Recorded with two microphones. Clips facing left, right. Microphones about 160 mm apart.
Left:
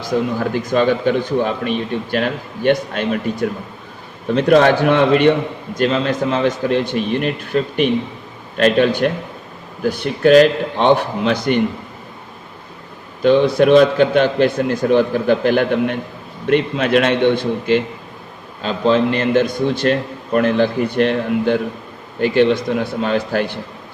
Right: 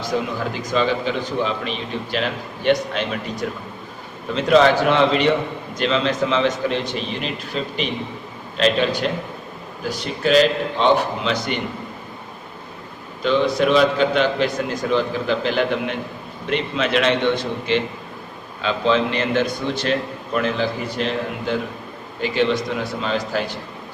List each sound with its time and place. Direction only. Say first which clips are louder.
0.1 s a man's voice: left 6 dB; 50° left (ahead or behind)
4.4 s a man's voice: left 3 dB; 55° left (ahead or behind)
13.2 s a man's voice: left 6 dB; 55° left (ahead or behind)